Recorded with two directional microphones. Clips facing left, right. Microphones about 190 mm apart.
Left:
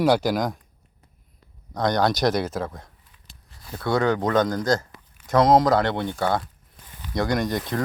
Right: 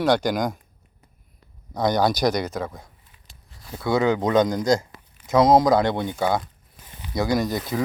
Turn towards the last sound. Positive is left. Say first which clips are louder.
# right 1 dB
turn(degrees=-5)  # may be behind; listen again after turning